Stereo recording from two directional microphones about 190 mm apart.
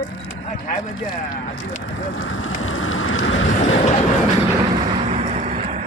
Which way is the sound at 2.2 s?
90° left.